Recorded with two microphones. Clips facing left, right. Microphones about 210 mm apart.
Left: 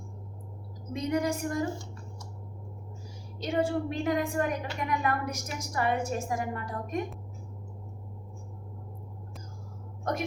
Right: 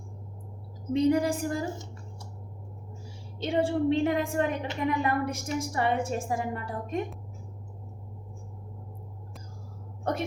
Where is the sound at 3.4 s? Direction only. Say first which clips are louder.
Right 3 dB; 30° right (ahead or behind).